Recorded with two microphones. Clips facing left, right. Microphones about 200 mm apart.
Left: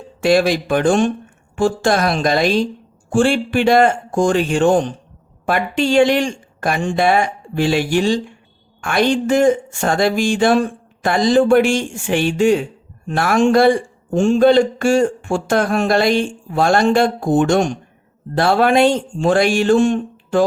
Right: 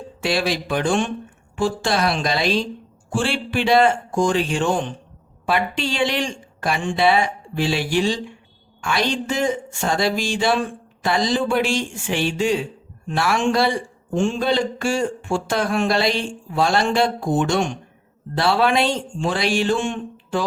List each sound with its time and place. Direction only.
0.2 s a man's voice: 50° left (ahead or behind)